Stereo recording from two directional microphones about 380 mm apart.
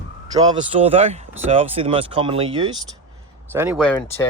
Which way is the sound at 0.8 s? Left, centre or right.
Centre.